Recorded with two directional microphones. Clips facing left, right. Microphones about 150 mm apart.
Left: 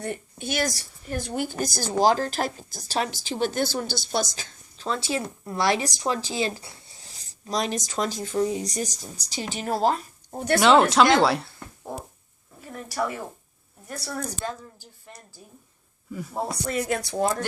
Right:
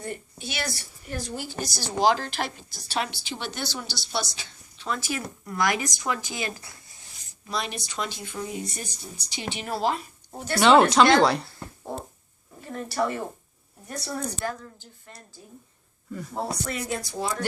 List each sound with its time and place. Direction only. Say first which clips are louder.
0.0 s a woman's voice: left 3 dB; 55° left (ahead or behind)
4.9 s speech: left 3 dB; 25° left (ahead or behind)
7.3 s speech: left 5 dB; 40° left (ahead or behind)
10.6 s a woman's voice: right 1 dB; centre (ahead or behind)
12.5 s a woman's voice: right 2 dB; 5° left (ahead or behind)
14.4 s a woman's voice: right 1 dB; 15° left (ahead or behind)
16.9 s speech: left 7 dB; 65° left (ahead or behind)